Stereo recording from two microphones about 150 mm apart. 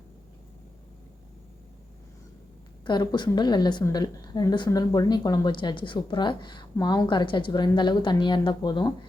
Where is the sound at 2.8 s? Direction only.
30° left (ahead or behind).